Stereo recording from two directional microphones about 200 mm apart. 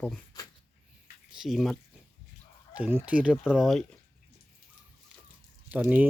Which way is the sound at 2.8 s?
10° right (ahead or behind).